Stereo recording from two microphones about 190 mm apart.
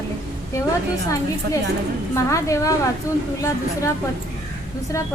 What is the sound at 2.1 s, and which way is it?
Speech, 15° left (ahead or behind).